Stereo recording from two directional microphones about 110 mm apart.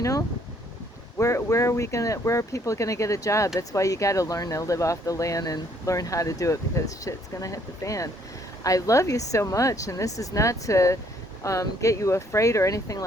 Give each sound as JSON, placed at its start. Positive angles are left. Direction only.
{"t": 0.0, "sound": "speech", "side_deg": 30}